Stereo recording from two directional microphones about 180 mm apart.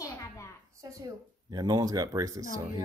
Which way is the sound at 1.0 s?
20° right (ahead or behind).